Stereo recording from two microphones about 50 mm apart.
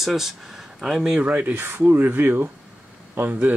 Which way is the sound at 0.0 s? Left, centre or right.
Centre.